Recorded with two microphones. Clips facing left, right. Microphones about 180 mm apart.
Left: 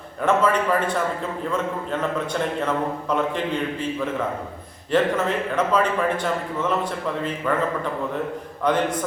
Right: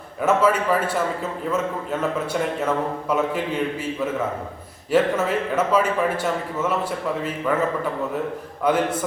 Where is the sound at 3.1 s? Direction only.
5° right (ahead or behind).